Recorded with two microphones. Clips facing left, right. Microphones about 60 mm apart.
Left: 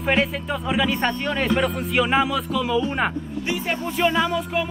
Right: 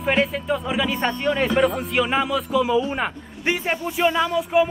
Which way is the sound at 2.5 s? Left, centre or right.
Centre.